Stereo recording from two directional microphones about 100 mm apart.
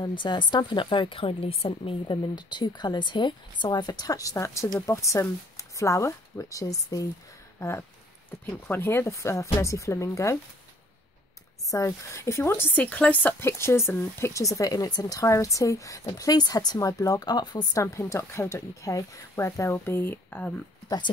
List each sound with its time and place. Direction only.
0.0 s a woman's voice: 50° left (ahead or behind); by 2.1 s 65° left (ahead or behind)
2.3 s a woman's voice: 45° left (ahead or behind)
8.3 s speech: 20° left (ahead or behind)
11.7 s speech: 30° left (ahead or behind); by 17.8 s 45° left (ahead or behind)
17.9 s speech: 30° left (ahead or behind); by 20.6 s 15° left (ahead or behind)